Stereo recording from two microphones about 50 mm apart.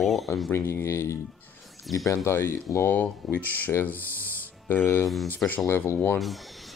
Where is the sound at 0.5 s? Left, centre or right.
Left.